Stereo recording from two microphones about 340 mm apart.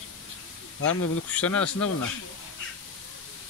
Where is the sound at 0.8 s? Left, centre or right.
Left.